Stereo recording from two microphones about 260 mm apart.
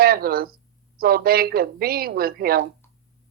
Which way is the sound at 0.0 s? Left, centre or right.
Right.